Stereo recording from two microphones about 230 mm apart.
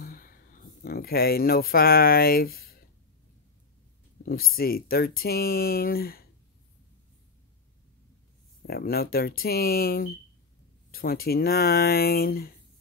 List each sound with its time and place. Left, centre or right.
0.0 s speech: left
4.2 s speech: left
8.6 s speech: left